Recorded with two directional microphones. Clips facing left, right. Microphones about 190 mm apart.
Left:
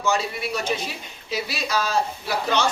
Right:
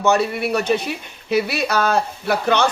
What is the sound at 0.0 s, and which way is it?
Speech, 60° right (ahead or behind).